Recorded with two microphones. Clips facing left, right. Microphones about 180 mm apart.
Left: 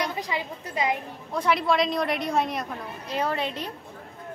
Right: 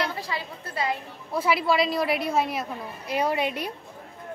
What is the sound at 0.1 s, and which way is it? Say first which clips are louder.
Speech: left 2 dB; 15° left (ahead or behind).